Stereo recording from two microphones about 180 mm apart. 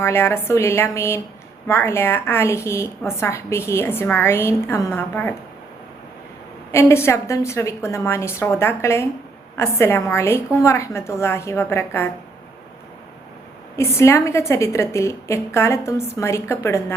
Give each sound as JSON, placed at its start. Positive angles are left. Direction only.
{"t": 0.0, "sound": "a woman's voice", "side_deg": 15}
{"t": 6.7, "sound": "a woman's voice", "side_deg": 15}
{"t": 13.7, "sound": "a woman's voice", "side_deg": 15}